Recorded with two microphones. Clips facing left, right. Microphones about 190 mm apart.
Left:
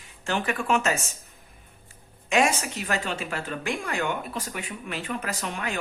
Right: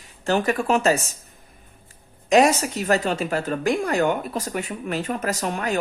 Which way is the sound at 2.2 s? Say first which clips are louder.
Right 7 dB; 40° right (ahead or behind).